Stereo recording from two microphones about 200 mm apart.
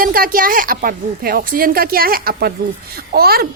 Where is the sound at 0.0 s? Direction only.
45° right (ahead or behind).